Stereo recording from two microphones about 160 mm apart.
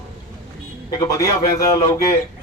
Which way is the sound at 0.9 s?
25° left (ahead or behind).